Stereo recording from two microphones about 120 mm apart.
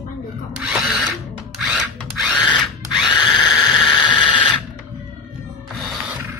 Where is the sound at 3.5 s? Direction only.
Centre (ahead or behind).